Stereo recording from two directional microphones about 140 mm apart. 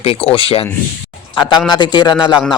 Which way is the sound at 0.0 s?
45° left (ahead or behind).